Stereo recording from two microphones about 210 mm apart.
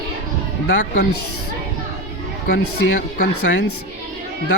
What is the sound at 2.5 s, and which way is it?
Speech, 55° left (ahead or behind).